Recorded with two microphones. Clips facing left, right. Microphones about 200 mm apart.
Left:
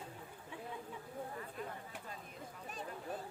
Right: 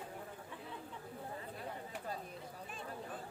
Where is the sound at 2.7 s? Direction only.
40° left (ahead or behind).